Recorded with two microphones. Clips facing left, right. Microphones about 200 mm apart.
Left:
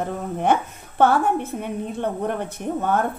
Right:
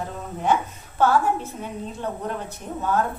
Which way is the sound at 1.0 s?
60° left (ahead or behind).